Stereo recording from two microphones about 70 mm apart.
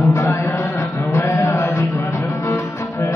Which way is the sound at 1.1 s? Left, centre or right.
Left.